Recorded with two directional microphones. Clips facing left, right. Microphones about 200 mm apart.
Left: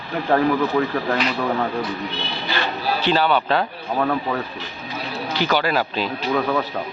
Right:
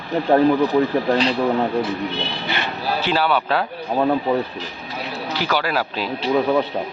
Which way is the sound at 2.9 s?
5° right (ahead or behind).